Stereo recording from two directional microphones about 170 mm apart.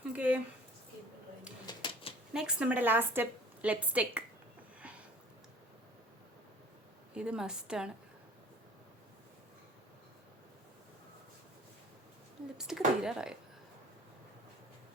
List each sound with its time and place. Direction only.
0.1 s a sound: 10° right (ahead or behind)
1.6 s typewriter: 25° left (ahead or behind)
2.3 s a woman's voice: 5° right (ahead or behind)
4.8 s sniff: 5° right (ahead or behind)
7.1 s speech: 5° right (ahead or behind)
12.5 s speech: 5° right (ahead or behind)